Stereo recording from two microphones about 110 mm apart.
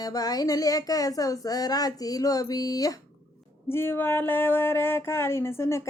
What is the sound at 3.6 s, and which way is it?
Speech, 20° left (ahead or behind).